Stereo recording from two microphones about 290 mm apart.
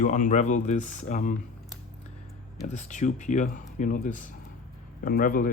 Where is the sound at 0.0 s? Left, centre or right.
Left.